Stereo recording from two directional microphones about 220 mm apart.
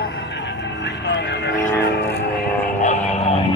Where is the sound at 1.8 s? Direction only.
50° left (ahead or behind).